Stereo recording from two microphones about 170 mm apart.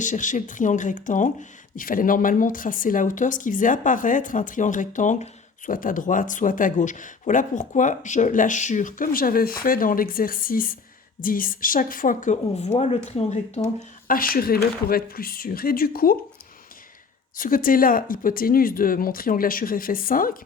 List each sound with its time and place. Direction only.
0.0 s speech: 50° left (ahead or behind)
13.7 s speech: 55° left (ahead or behind)
17.3 s speech: 55° left (ahead or behind)